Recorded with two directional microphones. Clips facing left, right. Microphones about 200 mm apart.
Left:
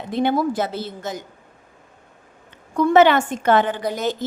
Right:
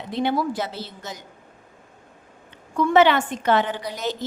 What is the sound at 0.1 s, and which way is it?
A woman's voice, 50° left (ahead or behind).